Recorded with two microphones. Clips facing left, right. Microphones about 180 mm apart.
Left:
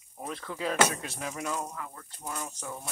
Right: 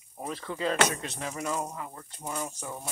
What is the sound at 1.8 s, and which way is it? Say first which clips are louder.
Speech: right 2 dB; 20° right (ahead or behind).